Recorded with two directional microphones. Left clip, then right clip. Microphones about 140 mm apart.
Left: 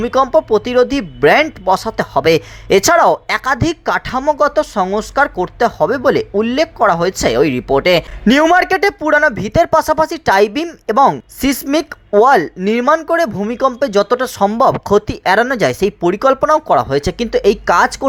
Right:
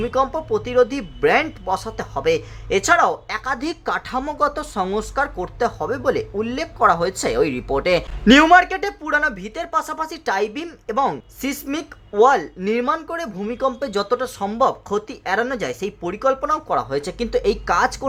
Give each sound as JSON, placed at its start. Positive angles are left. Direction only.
{"t": 0.0, "sound": "speech", "side_deg": 35}
{"t": 8.5, "sound": "a woman's voice", "side_deg": 40}
{"t": 12.6, "sound": "a woman's voice", "side_deg": 40}